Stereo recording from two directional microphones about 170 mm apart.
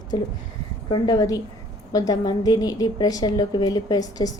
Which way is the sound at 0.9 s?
20° left (ahead or behind).